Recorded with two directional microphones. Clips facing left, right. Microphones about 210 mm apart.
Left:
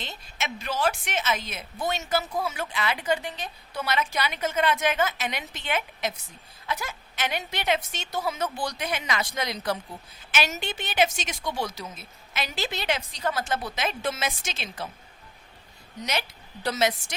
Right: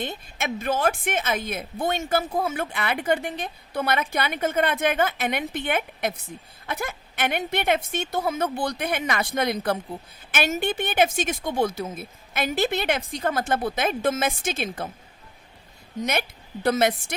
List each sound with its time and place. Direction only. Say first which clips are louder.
0.0 s a woman's voice: right 6 dB; 55° right (ahead or behind)
16.0 s a woman's voice: right 5 dB; 55° right (ahead or behind)